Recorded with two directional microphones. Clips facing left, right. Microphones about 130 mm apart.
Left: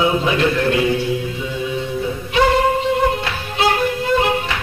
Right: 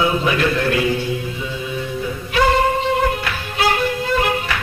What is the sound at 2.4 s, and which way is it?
Singing, 20° left (ahead or behind).